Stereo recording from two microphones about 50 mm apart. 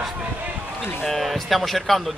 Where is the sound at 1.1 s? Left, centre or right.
Centre.